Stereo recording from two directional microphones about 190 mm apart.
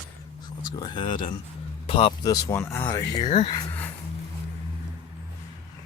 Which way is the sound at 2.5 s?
15° left (ahead or behind).